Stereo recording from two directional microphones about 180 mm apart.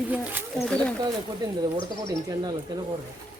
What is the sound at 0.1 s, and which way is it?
Speech, 10° right (ahead or behind).